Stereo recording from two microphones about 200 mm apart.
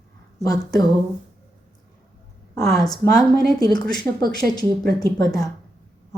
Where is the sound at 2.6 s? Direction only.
Centre (ahead or behind).